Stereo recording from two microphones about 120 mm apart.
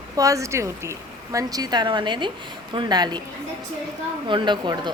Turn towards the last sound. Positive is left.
turn(degrees=-40)  # may be behind; listen again after turning